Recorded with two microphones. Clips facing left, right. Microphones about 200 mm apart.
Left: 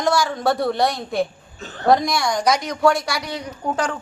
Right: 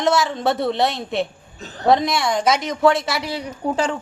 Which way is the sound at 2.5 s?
Centre (ahead or behind).